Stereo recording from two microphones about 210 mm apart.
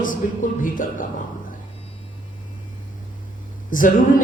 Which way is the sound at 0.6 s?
40° left (ahead or behind).